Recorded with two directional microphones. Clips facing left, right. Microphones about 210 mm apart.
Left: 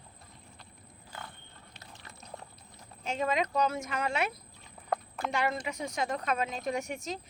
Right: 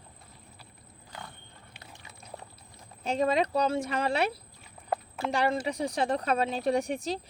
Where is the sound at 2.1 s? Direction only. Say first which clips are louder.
Right 1 dB; centre (ahead or behind).